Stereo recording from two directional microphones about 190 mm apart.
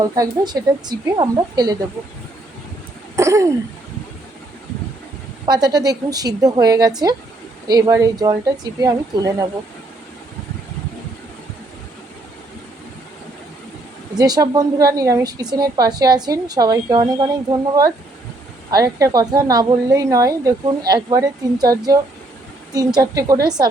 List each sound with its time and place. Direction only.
0.2 s a woman's voice: 20° right (ahead or behind)
3.2 s a sound: 15° right (ahead or behind)
5.5 s a woman's voice: 20° right (ahead or behind)
14.2 s a woman's voice: 20° right (ahead or behind)